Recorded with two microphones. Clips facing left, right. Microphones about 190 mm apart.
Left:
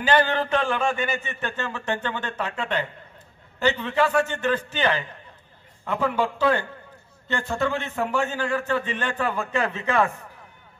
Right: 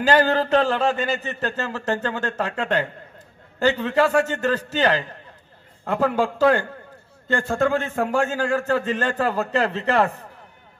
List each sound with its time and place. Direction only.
0.0 s a man's voice: 40° right (ahead or behind)